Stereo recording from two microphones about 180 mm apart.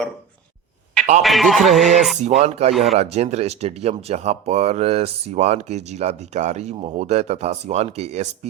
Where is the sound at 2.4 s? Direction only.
35° right (ahead or behind).